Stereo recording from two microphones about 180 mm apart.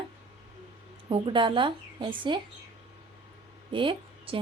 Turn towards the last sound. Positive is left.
turn(degrees=-30)  # may be behind; listen again after turning